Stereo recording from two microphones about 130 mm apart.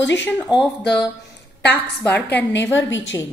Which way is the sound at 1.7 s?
15° left (ahead or behind).